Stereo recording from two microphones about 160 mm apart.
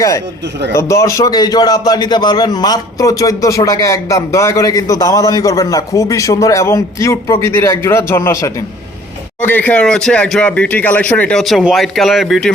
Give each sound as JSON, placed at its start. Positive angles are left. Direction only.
{"t": 0.7, "sound": "a man's voice", "side_deg": 15}